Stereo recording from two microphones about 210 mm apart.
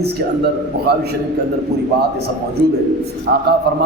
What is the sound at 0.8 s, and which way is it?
Speech, 50° right (ahead or behind).